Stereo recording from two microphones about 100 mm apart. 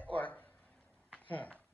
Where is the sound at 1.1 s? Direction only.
15° left (ahead or behind).